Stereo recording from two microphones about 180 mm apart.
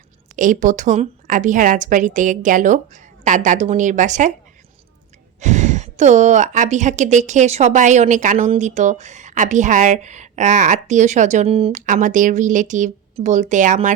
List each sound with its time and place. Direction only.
0.3 s speech: 45° right (ahead or behind)
5.4 s a woman's voice: 40° right (ahead or behind)